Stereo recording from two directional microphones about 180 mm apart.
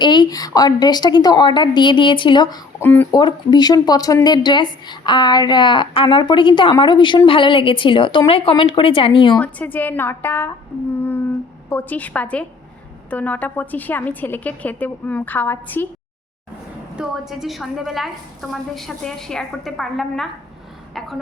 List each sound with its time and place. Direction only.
0.0 s speech: 25° left (ahead or behind)
2.8 s a woman's voice: 10° left (ahead or behind)
3.1 s speech: 25° left (ahead or behind)
9.4 s a woman's voice: 10° left (ahead or behind)
11.7 s a woman's voice: 10° left (ahead or behind)
17.0 s a woman's voice: centre (ahead or behind)